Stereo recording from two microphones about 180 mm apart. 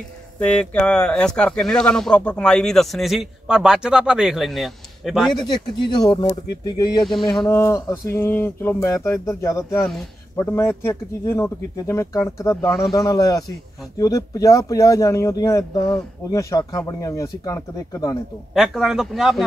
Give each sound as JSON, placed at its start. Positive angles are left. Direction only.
{"t": 0.4, "sound": "speech", "side_deg": 5}
{"t": 5.5, "sound": "speech", "side_deg": 25}
{"t": 7.1, "sound": "speech", "side_deg": 0}
{"t": 7.4, "sound": "speech", "side_deg": 15}
{"t": 12.7, "sound": "speech", "side_deg": 0}
{"t": 13.0, "sound": "speech", "side_deg": 20}
{"t": 18.5, "sound": "speech", "side_deg": 0}